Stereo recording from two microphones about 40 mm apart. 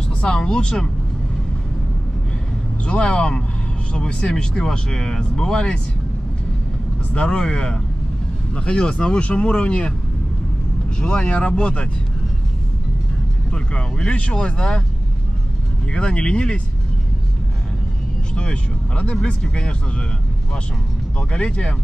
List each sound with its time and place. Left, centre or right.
0.2 s speech: centre
2.8 s speech: left
7.2 s speech: centre
11.0 s speech: left
13.5 s speech: left
15.9 s speech: left
18.3 s speech: left
21.3 s speech: left